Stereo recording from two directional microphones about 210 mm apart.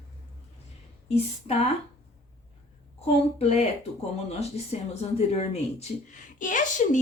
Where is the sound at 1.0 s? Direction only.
30° left (ahead or behind).